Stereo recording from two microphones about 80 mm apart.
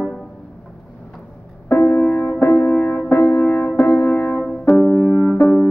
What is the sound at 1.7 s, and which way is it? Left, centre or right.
Music, left.